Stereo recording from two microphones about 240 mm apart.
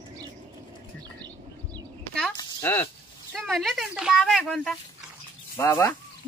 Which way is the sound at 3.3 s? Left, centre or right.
Centre.